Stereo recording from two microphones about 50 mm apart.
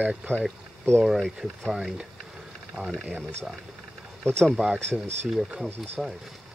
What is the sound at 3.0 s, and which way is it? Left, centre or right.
Speech, centre.